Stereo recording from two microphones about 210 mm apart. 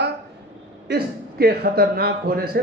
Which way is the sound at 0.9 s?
45° right (ahead or behind).